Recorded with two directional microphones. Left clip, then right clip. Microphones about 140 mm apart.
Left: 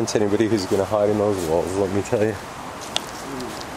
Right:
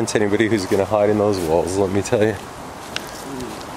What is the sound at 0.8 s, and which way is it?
Speech, 25° right (ahead or behind).